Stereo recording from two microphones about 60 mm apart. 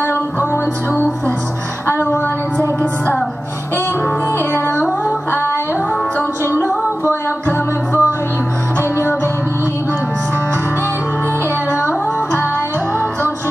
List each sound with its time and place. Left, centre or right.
1.9 s a sound: left
4.5 s music: left
5.0 s singing: left
7.4 s music: left